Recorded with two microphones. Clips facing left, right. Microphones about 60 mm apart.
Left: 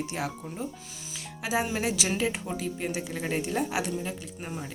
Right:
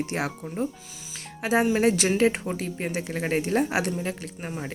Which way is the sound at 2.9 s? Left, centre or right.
Right.